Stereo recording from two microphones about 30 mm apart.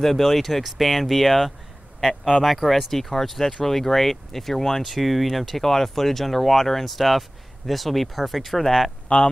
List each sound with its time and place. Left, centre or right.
0.0 s speech: centre
4.8 s speech: centre